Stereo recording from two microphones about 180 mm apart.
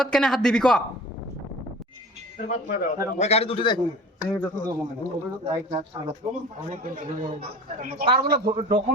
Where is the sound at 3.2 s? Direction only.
35° left (ahead or behind).